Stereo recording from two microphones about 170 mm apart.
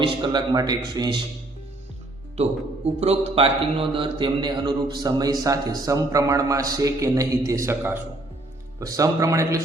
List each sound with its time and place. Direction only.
0.0 s a man's voice: 30° right (ahead or behind)
2.3 s a man's voice: 40° right (ahead or behind); by 9.6 s 20° right (ahead or behind)